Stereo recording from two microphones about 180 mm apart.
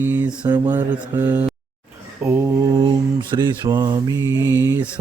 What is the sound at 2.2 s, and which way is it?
Mantra, 10° right (ahead or behind).